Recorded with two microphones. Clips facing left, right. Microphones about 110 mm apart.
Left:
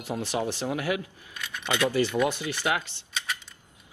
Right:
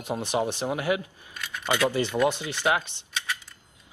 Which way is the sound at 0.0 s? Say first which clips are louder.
Right 2 dB; 20° right (ahead or behind).